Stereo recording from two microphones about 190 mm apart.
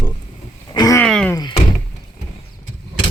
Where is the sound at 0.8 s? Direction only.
20° left (ahead or behind).